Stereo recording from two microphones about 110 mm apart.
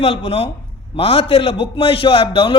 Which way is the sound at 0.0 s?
65° left (ahead or behind).